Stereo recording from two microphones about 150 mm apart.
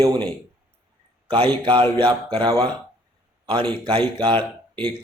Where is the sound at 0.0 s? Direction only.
30° right (ahead or behind).